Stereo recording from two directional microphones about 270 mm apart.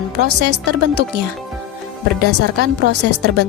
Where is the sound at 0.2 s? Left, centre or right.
Right.